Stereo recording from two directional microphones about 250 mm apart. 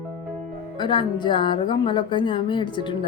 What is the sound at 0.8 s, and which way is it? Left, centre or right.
A woman's voice, centre.